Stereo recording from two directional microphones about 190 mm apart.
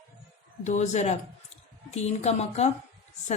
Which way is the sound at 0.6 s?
40° left (ahead or behind).